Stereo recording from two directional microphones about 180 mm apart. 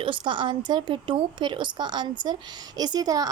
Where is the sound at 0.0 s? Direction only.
30° right (ahead or behind).